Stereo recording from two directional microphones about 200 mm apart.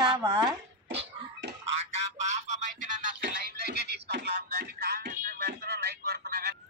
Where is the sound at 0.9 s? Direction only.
60° right (ahead or behind).